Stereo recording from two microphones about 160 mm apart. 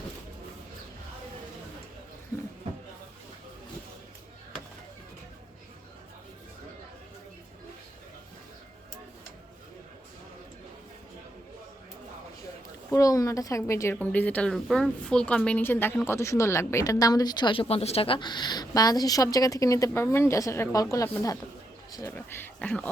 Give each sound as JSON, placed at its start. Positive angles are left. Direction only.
{"t": 12.9, "sound": "a woman's voice", "side_deg": 20}